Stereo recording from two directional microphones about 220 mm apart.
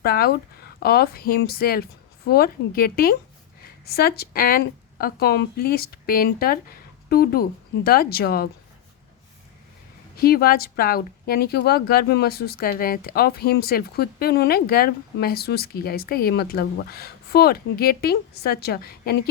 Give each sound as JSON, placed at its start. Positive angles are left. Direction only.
{"t": 0.0, "sound": "speech", "side_deg": 45}
{"t": 10.2, "sound": "speech", "side_deg": 45}